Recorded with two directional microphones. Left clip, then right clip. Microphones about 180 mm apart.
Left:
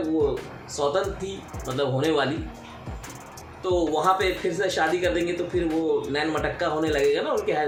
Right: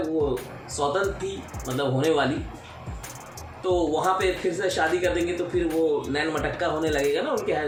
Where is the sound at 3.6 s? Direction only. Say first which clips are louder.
Left 1 dB; 20° left (ahead or behind).